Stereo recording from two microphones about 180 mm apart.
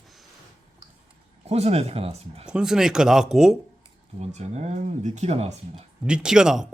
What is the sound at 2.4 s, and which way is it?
Speech, 5° right (ahead or behind).